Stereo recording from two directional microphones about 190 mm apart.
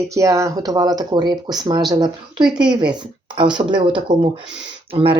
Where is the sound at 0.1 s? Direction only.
15° right (ahead or behind).